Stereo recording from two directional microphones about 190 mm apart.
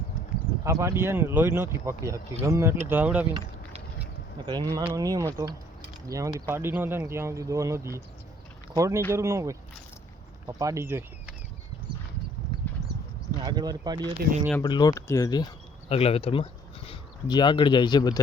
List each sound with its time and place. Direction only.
0.6 s speech: 15° right (ahead or behind)
4.4 s speech: 20° right (ahead or behind)
13.4 s speech: 20° right (ahead or behind)
14.2 s speech: 55° right (ahead or behind)
14.6 s speech: 20° left (ahead or behind)
15.9 s speech: 30° left (ahead or behind)